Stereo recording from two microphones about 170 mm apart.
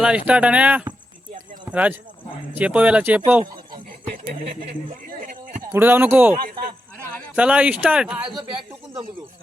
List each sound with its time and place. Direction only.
0.3 s speech: 5° right (ahead or behind)
5.7 s speech: 10° right (ahead or behind)
6.4 s speech: 60° right (ahead or behind)
7.3 s speech: 5° right (ahead or behind)